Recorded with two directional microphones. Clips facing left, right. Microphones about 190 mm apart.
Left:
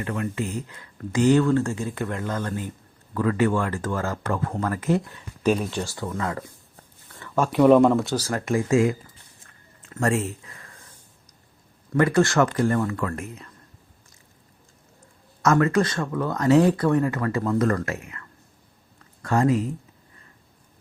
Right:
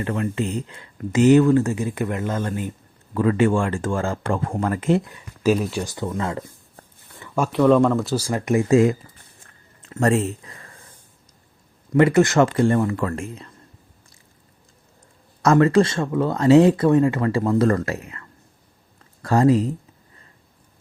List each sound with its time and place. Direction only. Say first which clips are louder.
0.0 s speech: right 4 dB; 30° right (ahead or behind)
5.1 s speech: right 3 dB; 5° right (ahead or behind)
5.8 s speech: right 3 dB; 20° right (ahead or behind)
7.2 s a sound: even; 10° right (ahead or behind)
7.5 s speech: left 1 dB; 10° left (ahead or behind)
7.9 s speech: right 1 dB; centre (ahead or behind)
8.2 s speech: right 4 dB; 10° right (ahead or behind)
8.7 s speech: right 4 dB; 40° right (ahead or behind)
10.4 s a sound: right 3 dB; 35° right (ahead or behind)
11.9 s speech: right 4 dB; 20° right (ahead or behind)
15.4 s speech: right 4 dB; 30° right (ahead or behind)